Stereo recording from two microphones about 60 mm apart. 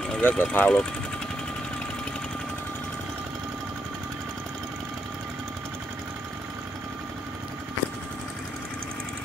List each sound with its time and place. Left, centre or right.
0.2 s speech: left